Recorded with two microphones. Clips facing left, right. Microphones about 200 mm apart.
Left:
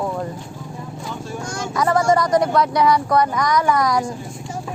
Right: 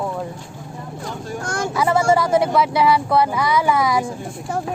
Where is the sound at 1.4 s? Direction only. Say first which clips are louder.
Right 6 dB; 55° right (ahead or behind).